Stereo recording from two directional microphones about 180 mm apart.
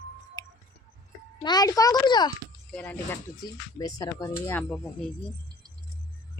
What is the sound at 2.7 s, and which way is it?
Child singing, 5° left (ahead or behind).